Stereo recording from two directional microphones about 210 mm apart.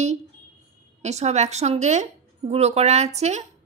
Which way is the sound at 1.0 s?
30° right (ahead or behind).